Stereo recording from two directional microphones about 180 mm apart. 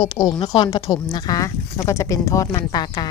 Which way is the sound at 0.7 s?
20° left (ahead or behind).